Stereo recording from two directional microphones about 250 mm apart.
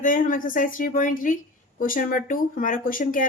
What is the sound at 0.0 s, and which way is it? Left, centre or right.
Speech, left.